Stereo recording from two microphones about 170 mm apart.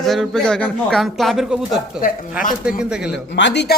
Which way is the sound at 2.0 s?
55° left (ahead or behind).